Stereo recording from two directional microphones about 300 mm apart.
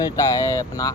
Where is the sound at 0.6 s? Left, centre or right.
Centre.